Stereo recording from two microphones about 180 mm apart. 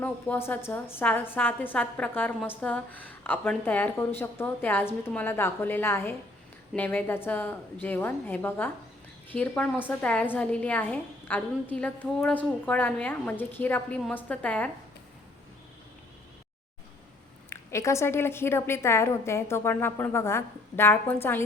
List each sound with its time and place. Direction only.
0.0 s a woman's voice: 10° left (ahead or behind)
17.5 s a woman's voice: 15° left (ahead or behind)